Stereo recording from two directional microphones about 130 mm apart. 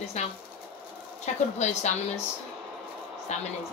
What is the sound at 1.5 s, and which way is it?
Speech, 60° left (ahead or behind).